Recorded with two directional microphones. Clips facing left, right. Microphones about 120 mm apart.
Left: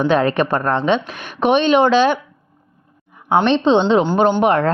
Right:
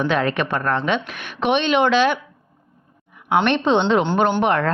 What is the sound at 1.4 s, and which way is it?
Speech, 40° left (ahead or behind).